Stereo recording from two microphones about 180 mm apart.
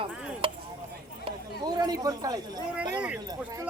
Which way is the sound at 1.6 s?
20° right (ahead or behind).